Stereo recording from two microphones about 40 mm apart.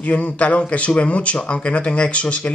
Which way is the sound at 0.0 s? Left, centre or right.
Left.